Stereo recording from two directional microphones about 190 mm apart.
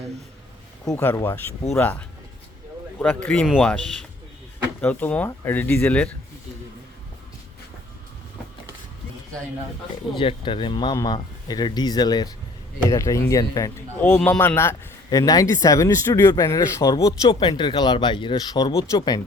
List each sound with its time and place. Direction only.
0.9 s speech: 15° left (ahead or behind)
10.2 s a man's voice: 25° left (ahead or behind)